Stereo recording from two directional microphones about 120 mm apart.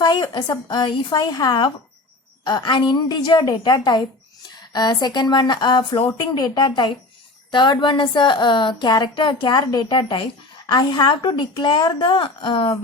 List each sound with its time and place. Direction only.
0.0 s a woman's voice: 35° left (ahead or behind)